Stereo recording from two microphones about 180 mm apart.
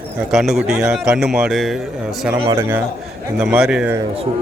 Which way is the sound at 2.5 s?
15° right (ahead or behind).